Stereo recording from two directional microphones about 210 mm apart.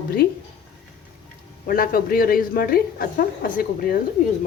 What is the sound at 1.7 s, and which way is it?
A woman's voice, 45° left (ahead or behind).